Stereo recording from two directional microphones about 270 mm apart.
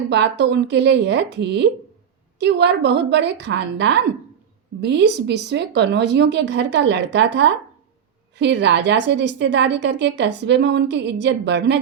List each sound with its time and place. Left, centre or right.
0.1 s a woman's voice: right